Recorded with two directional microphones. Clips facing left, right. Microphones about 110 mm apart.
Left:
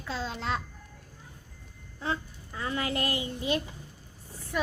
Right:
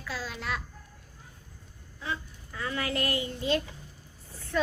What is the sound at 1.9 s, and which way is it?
A child's voice, 35° left (ahead or behind).